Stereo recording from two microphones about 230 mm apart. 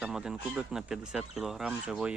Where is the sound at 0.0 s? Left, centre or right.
Centre.